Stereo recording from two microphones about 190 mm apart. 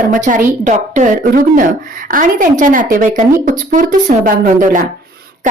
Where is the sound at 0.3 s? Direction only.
40° right (ahead or behind).